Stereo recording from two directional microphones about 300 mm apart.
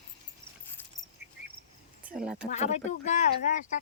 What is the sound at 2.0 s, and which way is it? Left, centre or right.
Speech, centre.